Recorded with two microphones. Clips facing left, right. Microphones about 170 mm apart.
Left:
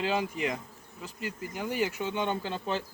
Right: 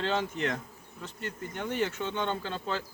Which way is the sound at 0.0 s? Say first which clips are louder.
Even; 10° left (ahead or behind).